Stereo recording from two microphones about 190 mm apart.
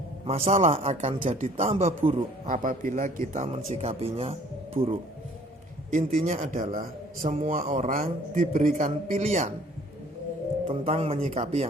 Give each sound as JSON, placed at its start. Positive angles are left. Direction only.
{"t": 0.3, "sound": "a man's voice", "side_deg": -30}
{"t": 2.5, "sound": "a man's voice", "side_deg": -45}
{"t": 6.1, "sound": "a man's voice", "side_deg": -45}
{"t": 10.7, "sound": "a man's voice", "side_deg": -30}